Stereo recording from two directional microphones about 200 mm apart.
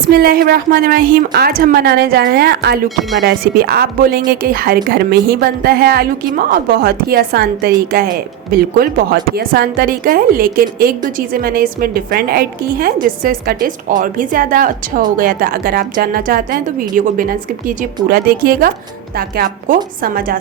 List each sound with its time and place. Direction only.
0.1 s speech: 50° right (ahead or behind)